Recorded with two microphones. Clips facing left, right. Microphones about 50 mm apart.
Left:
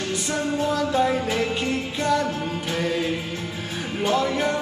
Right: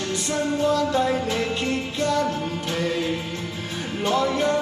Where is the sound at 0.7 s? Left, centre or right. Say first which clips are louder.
Even; centre.